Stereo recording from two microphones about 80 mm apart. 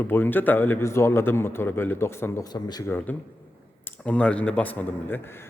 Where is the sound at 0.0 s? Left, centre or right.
Left.